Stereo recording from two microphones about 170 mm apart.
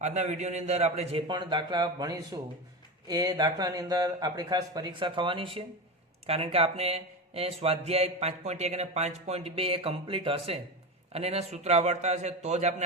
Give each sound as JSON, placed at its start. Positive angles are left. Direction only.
{"t": 0.0, "sound": "speech", "side_deg": -40}